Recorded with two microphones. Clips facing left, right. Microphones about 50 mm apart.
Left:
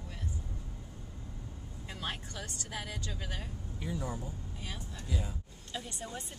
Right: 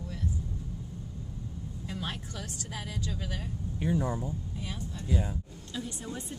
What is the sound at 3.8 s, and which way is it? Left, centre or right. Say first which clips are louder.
Speech: right 8 dB; right.